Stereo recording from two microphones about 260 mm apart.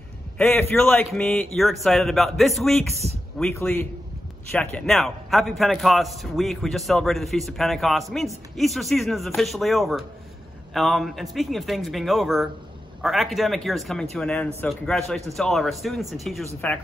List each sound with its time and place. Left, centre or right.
0.4 s a man's voice: centre